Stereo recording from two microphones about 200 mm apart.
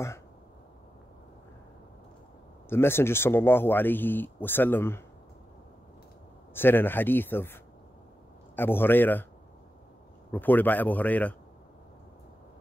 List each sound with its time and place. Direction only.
2.7 s speech: 10° left (ahead or behind)
6.5 s speech: 10° left (ahead or behind)
10.3 s speech: 10° left (ahead or behind)